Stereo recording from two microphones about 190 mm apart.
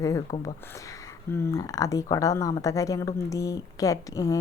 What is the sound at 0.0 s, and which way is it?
A woman's voice, 15° left (ahead or behind).